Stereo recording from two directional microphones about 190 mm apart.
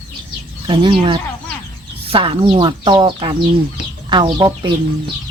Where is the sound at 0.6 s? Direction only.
25° right (ahead or behind).